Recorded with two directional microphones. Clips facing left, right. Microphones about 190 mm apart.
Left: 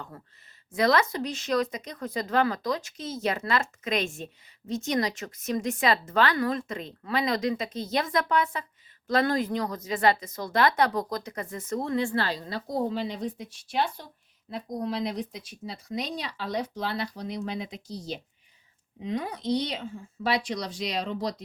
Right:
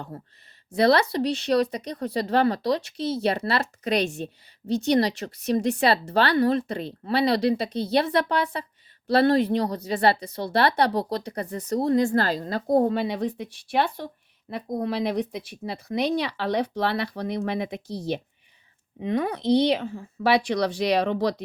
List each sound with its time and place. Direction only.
0.1 s a woman's voice: 30° right (ahead or behind); by 21.4 s 65° right (ahead or behind)